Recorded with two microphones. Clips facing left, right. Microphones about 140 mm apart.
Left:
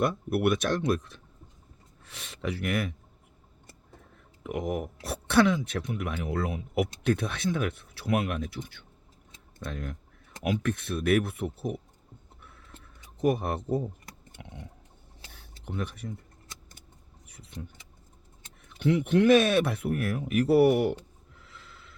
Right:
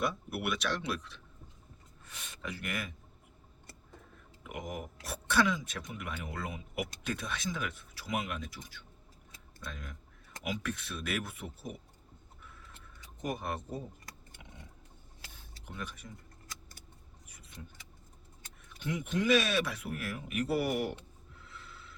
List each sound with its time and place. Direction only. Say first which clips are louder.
0.0 s speech: left 9 dB; 60° left (ahead or behind)
2.0 s speech: left 9 dB; 75° left (ahead or behind)
4.4 s speech: left 10 dB; 60° left (ahead or behind)
12.4 s a sound: left 1 dB; 60° left (ahead or behind)
13.2 s speech: left 10 dB; 65° left (ahead or behind)
15.3 s a sound: left 10 dB; 65° left (ahead or behind)
18.8 s speech: left 11 dB; 70° left (ahead or behind)